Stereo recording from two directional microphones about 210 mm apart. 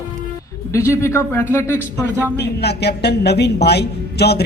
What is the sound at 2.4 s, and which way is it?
A woman's voice, 50° left (ahead or behind).